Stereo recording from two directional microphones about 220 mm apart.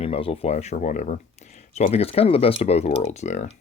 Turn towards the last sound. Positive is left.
turn(degrees=30)  # may be behind; listen again after turning